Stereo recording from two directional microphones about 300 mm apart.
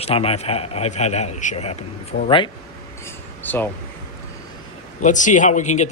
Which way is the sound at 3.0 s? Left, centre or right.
Centre.